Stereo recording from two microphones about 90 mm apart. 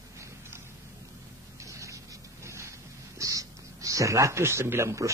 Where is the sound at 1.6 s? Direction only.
35° right (ahead or behind).